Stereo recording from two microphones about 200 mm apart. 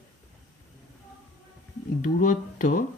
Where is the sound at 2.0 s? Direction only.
40° left (ahead or behind).